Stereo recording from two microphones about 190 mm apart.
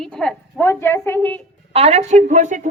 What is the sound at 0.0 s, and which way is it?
A woman's voice, 5° left (ahead or behind).